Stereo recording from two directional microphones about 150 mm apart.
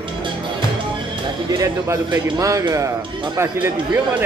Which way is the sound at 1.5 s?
20° right (ahead or behind).